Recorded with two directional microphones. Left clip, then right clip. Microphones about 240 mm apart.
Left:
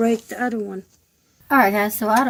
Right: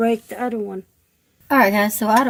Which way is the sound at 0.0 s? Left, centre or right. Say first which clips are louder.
Right 1 dB; right.